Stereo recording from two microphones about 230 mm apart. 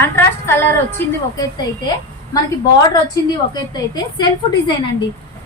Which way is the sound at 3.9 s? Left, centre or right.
Centre.